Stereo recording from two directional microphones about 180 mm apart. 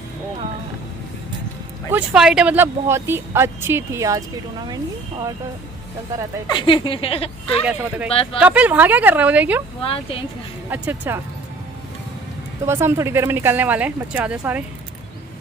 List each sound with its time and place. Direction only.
1.9 s speech: 5° right (ahead or behind); by 5.3 s 25° right (ahead or behind)
6.4 s a woman's voice: 25° left (ahead or behind)
7.6 s speech: 5° right (ahead or behind)
8.1 s speech: 30° left (ahead or behind)
8.4 s speech: 10° right (ahead or behind)
9.8 s speech: 30° left (ahead or behind)
10.7 s speech: 10° right (ahead or behind)
12.6 s speech: 15° right (ahead or behind)